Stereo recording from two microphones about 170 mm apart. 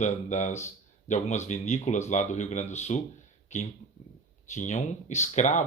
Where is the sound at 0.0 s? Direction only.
45° left (ahead or behind).